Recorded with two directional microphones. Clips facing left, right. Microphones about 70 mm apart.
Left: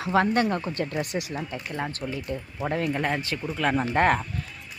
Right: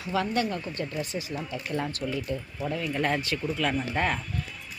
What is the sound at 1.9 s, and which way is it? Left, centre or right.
Speech, left.